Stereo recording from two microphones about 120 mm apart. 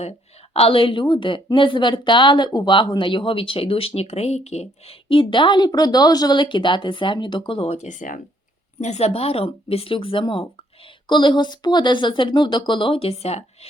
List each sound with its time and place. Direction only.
0.0 s a woman's voice: 60° left (ahead or behind); by 8.2 s 90° left
8.8 s a woman's voice: 70° left (ahead or behind)